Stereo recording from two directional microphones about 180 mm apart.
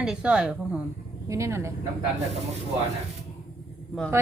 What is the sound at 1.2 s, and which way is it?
Speech, 15° right (ahead or behind).